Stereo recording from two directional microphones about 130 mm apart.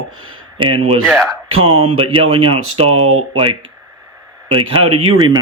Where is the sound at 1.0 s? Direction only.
Centre (ahead or behind).